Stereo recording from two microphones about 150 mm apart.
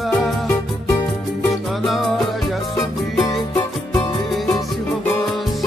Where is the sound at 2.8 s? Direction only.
25° left (ahead or behind).